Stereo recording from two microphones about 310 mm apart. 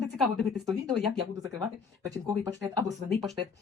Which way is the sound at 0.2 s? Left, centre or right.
Centre.